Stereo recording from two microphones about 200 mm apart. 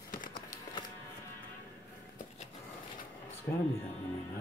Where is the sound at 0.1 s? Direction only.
45° left (ahead or behind).